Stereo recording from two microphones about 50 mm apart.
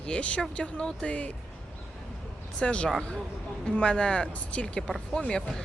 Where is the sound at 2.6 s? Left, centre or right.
Left.